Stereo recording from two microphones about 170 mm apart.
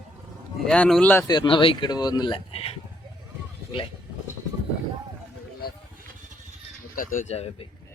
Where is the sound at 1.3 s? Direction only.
30° left (ahead or behind).